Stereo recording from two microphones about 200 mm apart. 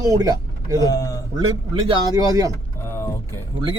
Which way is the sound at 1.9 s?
20° right (ahead or behind).